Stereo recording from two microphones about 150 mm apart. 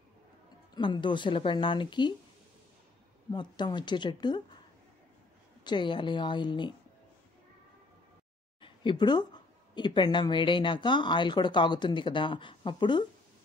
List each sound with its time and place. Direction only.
0.7 s speech: 30° left (ahead or behind)
3.3 s speech: 30° left (ahead or behind)
5.6 s speech: 30° left (ahead or behind)
8.5 s speech: 35° left (ahead or behind)